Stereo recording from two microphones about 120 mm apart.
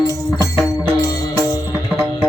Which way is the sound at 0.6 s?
25° left (ahead or behind).